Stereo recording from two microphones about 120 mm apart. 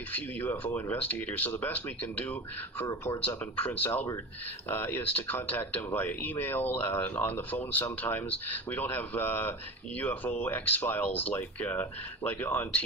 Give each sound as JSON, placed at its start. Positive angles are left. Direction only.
{"t": 0.1, "sound": "speech", "side_deg": 15}